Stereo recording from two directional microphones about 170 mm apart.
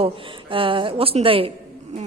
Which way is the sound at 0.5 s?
30° right (ahead or behind).